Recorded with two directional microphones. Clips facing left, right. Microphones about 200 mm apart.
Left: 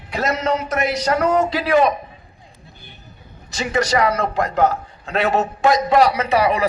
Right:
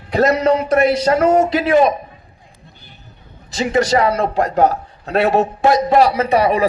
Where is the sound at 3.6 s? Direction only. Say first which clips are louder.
Right 4 dB; 30° right (ahead or behind).